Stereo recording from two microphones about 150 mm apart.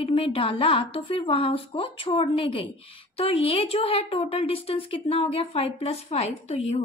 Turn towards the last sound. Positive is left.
turn(degrees=45)  # may be behind; listen again after turning